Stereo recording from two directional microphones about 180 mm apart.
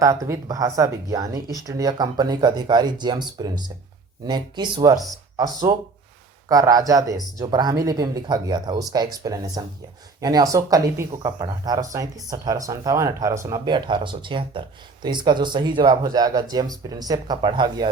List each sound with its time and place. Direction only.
0.0 s speech: 15° right (ahead or behind)
6.5 s speech: 20° right (ahead or behind)